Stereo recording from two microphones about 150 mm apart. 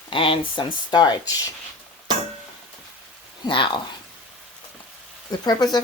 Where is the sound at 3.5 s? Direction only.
35° left (ahead or behind).